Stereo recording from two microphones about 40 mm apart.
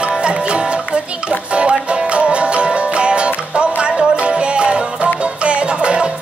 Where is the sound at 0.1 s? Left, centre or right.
Right.